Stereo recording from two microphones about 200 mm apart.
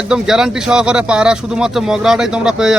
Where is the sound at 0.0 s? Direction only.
5° right (ahead or behind).